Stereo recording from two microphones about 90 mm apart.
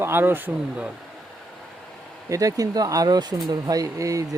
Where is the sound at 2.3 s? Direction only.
40° right (ahead or behind).